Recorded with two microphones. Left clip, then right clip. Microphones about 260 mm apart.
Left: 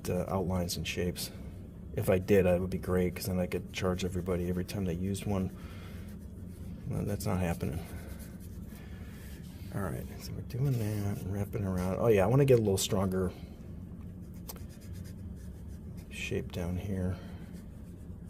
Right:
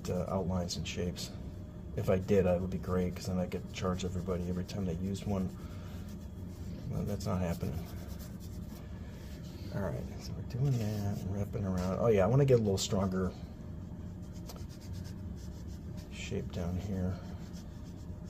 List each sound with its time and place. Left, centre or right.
0.0 s speech: left
6.9 s speech: left
9.7 s speech: left
16.2 s speech: left